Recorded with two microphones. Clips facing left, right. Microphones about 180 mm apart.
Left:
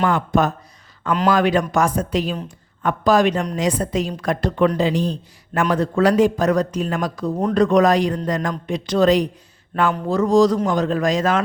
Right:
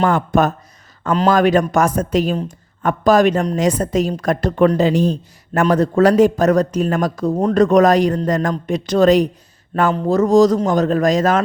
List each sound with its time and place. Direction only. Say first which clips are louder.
0.0 s a man's voice: right 3 dB; 50° right (ahead or behind)